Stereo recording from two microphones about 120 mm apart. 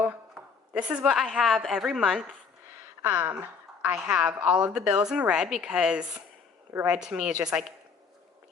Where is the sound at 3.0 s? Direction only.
15° right (ahead or behind).